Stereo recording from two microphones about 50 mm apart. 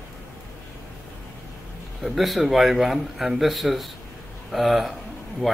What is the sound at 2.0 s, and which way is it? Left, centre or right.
Speech, centre.